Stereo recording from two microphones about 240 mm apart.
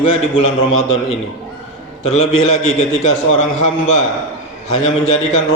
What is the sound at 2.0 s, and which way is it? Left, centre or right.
A man's voice, left.